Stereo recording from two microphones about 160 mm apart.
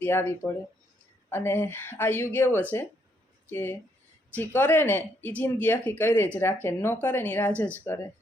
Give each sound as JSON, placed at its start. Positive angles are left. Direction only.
{"t": 0.0, "sound": "speech", "side_deg": 15}